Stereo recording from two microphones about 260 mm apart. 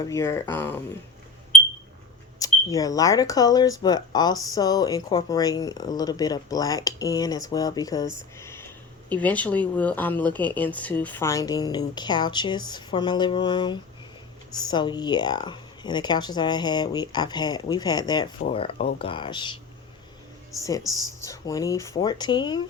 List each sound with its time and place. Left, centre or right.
0.0 s speech: centre
2.4 s speech: centre
20.6 s speech: centre